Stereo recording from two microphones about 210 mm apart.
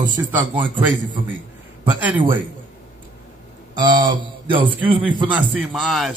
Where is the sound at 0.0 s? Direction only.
20° right (ahead or behind).